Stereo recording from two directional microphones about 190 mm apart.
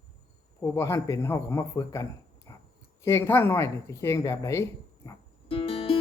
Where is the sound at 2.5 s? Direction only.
20° left (ahead or behind).